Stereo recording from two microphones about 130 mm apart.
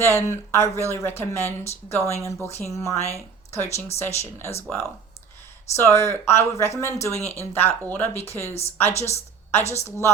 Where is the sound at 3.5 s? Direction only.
20° left (ahead or behind).